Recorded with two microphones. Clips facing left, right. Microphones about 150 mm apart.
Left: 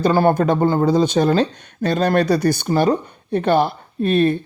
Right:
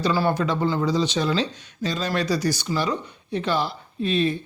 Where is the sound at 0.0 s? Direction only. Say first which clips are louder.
Left 7 dB; 50° left (ahead or behind).